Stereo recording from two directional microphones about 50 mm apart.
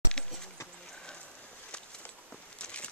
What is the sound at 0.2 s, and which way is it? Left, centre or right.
Bee, centre.